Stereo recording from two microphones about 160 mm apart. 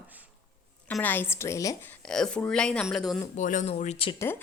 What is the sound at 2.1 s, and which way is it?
Speech, 5° left (ahead or behind).